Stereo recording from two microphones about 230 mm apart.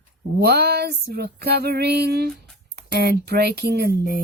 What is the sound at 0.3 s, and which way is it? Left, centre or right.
Speech, right.